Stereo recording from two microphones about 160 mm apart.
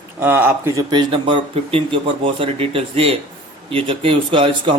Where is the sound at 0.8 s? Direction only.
30° right (ahead or behind).